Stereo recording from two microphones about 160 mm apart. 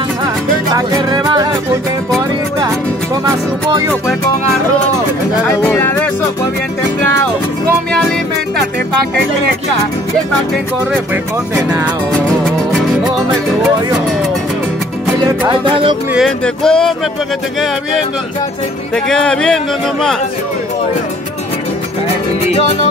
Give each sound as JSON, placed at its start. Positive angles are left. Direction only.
{"t": 0.7, "sound": "music", "side_deg": -25}
{"t": 3.3, "sound": "music", "side_deg": -20}
{"t": 5.5, "sound": "speech", "side_deg": 15}
{"t": 11.5, "sound": "speech", "side_deg": -15}
{"t": 15.4, "sound": "music", "side_deg": -30}
{"t": 16.1, "sound": "speech", "side_deg": 0}
{"t": 19.0, "sound": "speech", "side_deg": 5}